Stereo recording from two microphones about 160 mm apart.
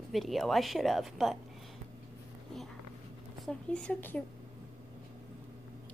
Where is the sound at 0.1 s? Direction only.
Centre (ahead or behind).